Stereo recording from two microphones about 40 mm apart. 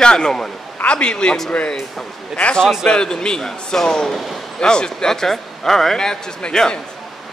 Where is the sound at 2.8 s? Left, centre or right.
Left.